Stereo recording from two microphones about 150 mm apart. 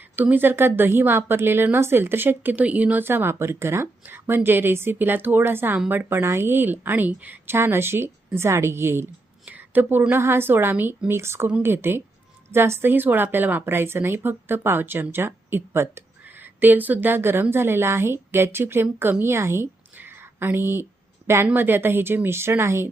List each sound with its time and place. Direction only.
0.2 s a woman's voice: 10° right (ahead or behind)